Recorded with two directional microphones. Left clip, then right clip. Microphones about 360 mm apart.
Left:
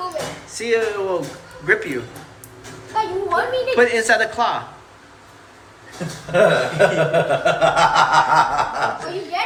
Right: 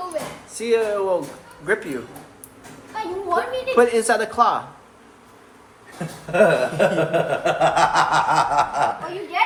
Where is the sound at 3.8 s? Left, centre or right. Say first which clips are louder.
Left 1 dB; centre.